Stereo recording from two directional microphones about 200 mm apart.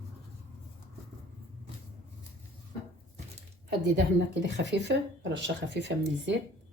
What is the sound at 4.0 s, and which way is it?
Speech, 60° right (ahead or behind).